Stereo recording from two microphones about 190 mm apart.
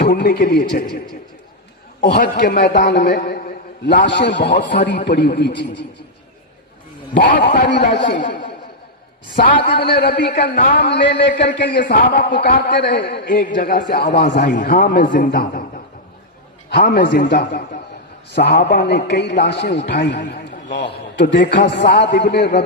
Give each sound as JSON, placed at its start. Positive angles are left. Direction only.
{"t": 0.0, "sound": "a man's voice", "side_deg": 50}
{"t": 2.0, "sound": "a man's voice", "side_deg": 50}
{"t": 3.2, "sound": "a sound", "side_deg": 55}
{"t": 4.0, "sound": "a man's voice", "side_deg": 65}
{"t": 5.2, "sound": "a man's voice", "side_deg": 45}
{"t": 7.3, "sound": "a man's voice", "side_deg": 65}
{"t": 8.2, "sound": "a man's voice", "side_deg": 45}
{"t": 9.6, "sound": "a man's voice", "side_deg": 25}
{"t": 9.8, "sound": "a man's voice", "side_deg": 55}
{"t": 11.9, "sound": "a man's voice", "side_deg": 45}
{"t": 13.4, "sound": "a man's voice", "side_deg": 50}
{"t": 14.8, "sound": "a man's voice", "side_deg": 45}
{"t": 16.8, "sound": "a man's voice", "side_deg": 60}